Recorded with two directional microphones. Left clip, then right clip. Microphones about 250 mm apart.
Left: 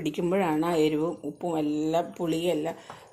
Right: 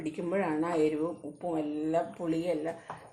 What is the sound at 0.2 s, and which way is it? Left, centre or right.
A woman's voice, left.